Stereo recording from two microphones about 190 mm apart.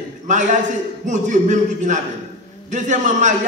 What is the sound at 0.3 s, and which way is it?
A man's voice, 40° right (ahead or behind).